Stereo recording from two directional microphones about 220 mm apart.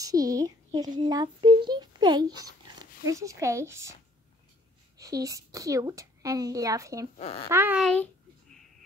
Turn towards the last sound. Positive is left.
turn(degrees=-10)  # may be behind; listen again after turning